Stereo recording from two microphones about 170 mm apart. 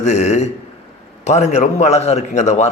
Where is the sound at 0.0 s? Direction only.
40° left (ahead or behind).